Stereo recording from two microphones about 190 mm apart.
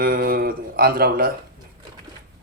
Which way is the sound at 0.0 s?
50° right (ahead or behind).